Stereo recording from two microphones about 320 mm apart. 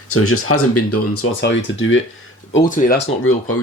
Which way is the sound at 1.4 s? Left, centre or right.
Left.